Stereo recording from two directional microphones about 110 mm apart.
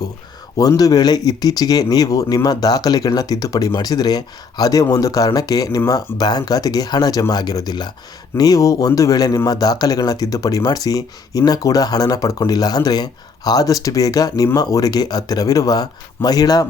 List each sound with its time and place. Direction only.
0.8 s speech: 35° left (ahead or behind)